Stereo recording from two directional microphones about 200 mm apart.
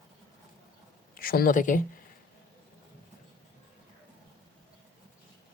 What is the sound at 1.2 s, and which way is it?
Speech, 50° left (ahead or behind).